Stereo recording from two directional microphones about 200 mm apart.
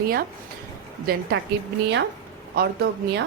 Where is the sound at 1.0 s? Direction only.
50° right (ahead or behind).